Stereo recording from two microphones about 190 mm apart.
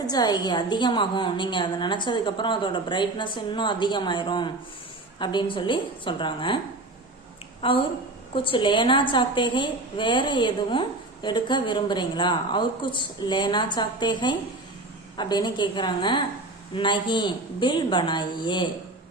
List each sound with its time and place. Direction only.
0.0 s a woman's voice: 20° left (ahead or behind)
7.6 s a woman's voice: 25° left (ahead or behind)